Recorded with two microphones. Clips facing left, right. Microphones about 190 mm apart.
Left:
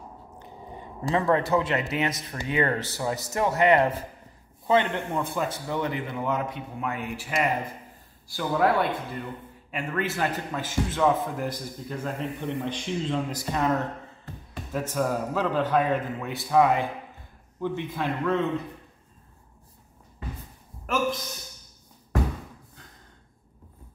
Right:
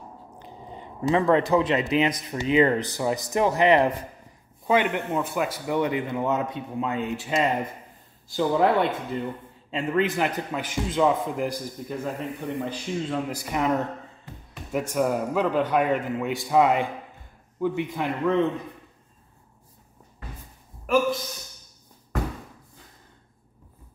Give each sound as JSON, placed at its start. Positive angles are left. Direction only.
{"t": 0.7, "sound": "a man's voice", "side_deg": -20}
{"t": 20.8, "sound": "a man's voice", "side_deg": -5}